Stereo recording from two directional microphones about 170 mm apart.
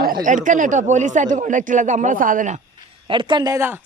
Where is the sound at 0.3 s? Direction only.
50° right (ahead or behind).